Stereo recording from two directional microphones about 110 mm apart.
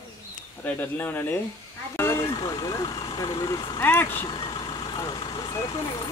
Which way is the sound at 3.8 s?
20° left (ahead or behind).